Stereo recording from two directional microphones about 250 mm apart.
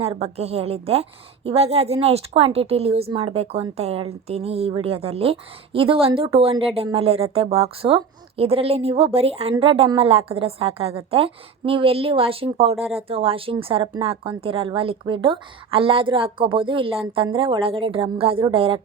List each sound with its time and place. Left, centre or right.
0.0 s a woman's voice: right